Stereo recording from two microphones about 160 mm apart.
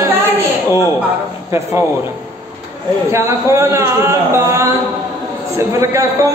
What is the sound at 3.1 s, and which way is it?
A man's voice, 20° right (ahead or behind).